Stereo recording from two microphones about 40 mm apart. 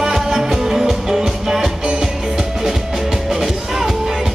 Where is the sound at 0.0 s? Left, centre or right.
Centre.